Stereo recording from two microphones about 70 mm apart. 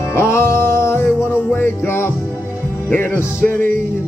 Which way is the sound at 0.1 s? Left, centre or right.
Left.